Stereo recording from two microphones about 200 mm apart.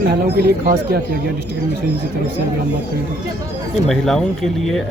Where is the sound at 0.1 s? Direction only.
55° right (ahead or behind).